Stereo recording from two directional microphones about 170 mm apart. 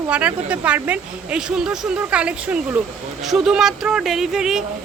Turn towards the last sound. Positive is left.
turn(degrees=-5)  # may be behind; listen again after turning